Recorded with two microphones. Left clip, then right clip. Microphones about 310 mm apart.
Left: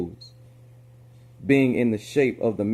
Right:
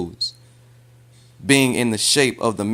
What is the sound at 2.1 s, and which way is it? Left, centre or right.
Speech, right.